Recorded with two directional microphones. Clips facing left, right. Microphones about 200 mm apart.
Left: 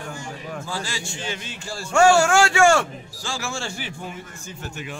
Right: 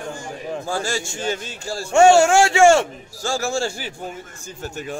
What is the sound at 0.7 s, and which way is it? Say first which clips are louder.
A man's voice: right 9 dB; 45° right (ahead or behind).